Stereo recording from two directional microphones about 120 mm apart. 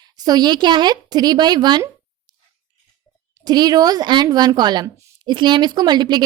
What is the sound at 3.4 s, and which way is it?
Speech, 35° right (ahead or behind).